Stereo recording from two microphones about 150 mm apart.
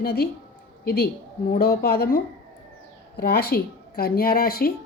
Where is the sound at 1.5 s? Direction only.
90° left.